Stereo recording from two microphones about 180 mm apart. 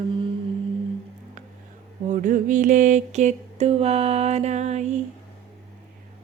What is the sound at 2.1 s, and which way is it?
Mantra, 45° right (ahead or behind).